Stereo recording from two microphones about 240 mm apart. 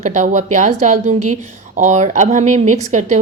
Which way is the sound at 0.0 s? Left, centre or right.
Right.